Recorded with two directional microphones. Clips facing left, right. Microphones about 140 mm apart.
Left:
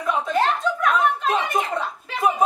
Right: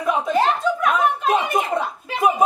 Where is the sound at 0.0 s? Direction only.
10° right (ahead or behind).